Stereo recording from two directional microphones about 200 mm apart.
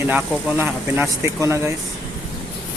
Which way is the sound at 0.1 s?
10° right (ahead or behind).